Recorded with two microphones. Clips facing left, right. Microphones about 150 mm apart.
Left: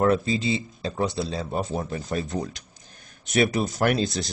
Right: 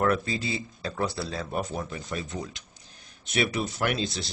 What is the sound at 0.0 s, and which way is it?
Speech, 25° left (ahead or behind).